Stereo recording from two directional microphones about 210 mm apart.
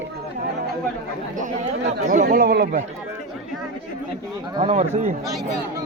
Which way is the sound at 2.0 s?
35° right (ahead or behind).